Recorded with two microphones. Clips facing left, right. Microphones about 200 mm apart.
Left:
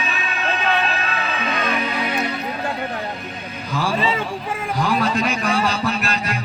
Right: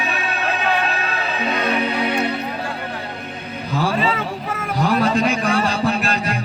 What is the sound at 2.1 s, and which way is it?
Music, 60° right (ahead or behind).